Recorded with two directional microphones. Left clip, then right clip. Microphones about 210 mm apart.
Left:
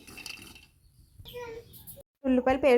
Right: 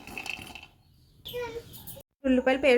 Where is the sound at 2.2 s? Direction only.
10° left (ahead or behind).